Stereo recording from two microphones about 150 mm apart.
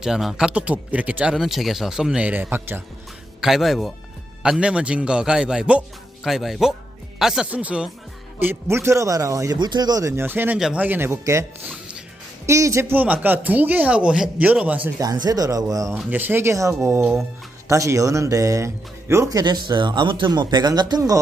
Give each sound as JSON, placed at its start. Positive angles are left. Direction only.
{"t": 0.0, "sound": "speech", "side_deg": 0}
{"t": 3.4, "sound": "speech", "side_deg": 0}
{"t": 14.8, "sound": "speech", "side_deg": -25}
{"t": 16.0, "sound": "speech", "side_deg": -10}